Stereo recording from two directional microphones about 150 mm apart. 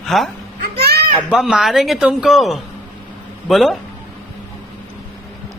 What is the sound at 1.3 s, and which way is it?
Speech, 5° right (ahead or behind).